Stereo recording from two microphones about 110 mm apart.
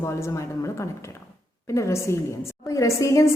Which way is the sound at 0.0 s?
25° left (ahead or behind).